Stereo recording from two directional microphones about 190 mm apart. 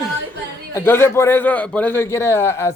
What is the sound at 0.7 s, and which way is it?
A man's voice, 15° left (ahead or behind).